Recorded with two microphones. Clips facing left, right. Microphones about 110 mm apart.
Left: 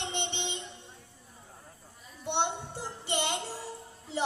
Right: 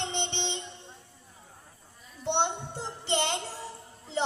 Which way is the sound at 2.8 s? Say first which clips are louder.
Right 4 dB; 10° left (ahead or behind).